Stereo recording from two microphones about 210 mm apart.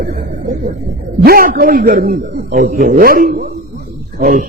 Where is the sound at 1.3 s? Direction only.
45° right (ahead or behind).